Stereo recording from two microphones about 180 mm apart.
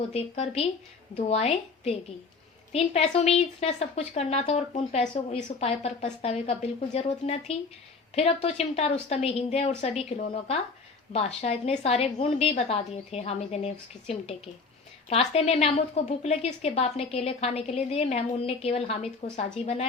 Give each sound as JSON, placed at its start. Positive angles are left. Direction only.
{"t": 0.1, "sound": "a woman's voice", "side_deg": 35}